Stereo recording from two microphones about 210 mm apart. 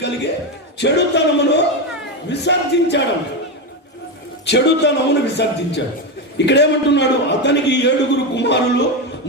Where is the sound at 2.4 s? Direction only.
55° left (ahead or behind).